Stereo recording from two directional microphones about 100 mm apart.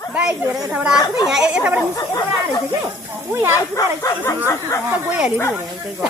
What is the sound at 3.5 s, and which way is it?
Speech, 30° left (ahead or behind).